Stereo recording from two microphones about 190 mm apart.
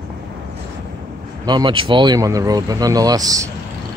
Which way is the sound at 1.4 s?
25° right (ahead or behind).